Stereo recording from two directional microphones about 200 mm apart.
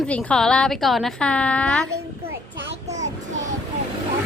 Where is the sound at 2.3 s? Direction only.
60° right (ahead or behind).